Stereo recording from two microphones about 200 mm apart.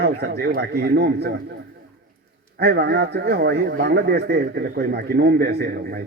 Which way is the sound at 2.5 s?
55° right (ahead or behind).